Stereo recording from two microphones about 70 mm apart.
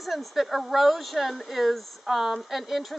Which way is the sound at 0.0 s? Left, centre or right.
Centre.